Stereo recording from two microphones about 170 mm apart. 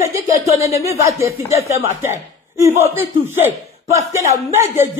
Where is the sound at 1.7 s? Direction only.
15° right (ahead or behind).